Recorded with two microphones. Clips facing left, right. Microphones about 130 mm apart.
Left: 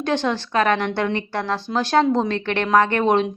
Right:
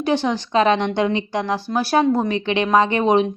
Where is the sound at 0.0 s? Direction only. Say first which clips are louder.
Right 2 dB; 10° right (ahead or behind).